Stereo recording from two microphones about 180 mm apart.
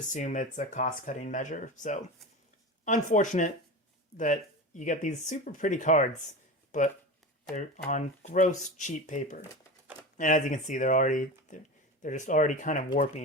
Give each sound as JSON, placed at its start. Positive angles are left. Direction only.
{"t": 0.0, "sound": "speech", "side_deg": 45}